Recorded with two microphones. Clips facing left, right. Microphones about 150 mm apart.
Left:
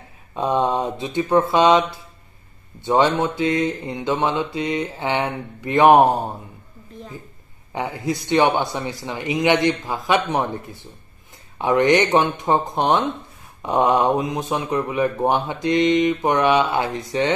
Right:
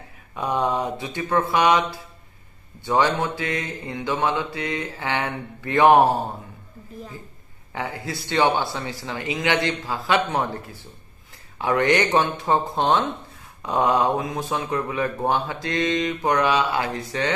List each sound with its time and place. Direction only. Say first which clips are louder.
0.3 s speech: left 3 dB; 25° left (ahead or behind)
7.7 s speech: left 5 dB; 20° left (ahead or behind)